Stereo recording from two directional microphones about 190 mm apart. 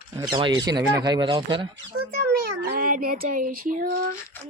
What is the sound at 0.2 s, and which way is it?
Speech, 20° right (ahead or behind).